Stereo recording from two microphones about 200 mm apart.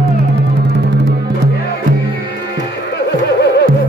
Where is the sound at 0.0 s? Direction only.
55° right (ahead or behind).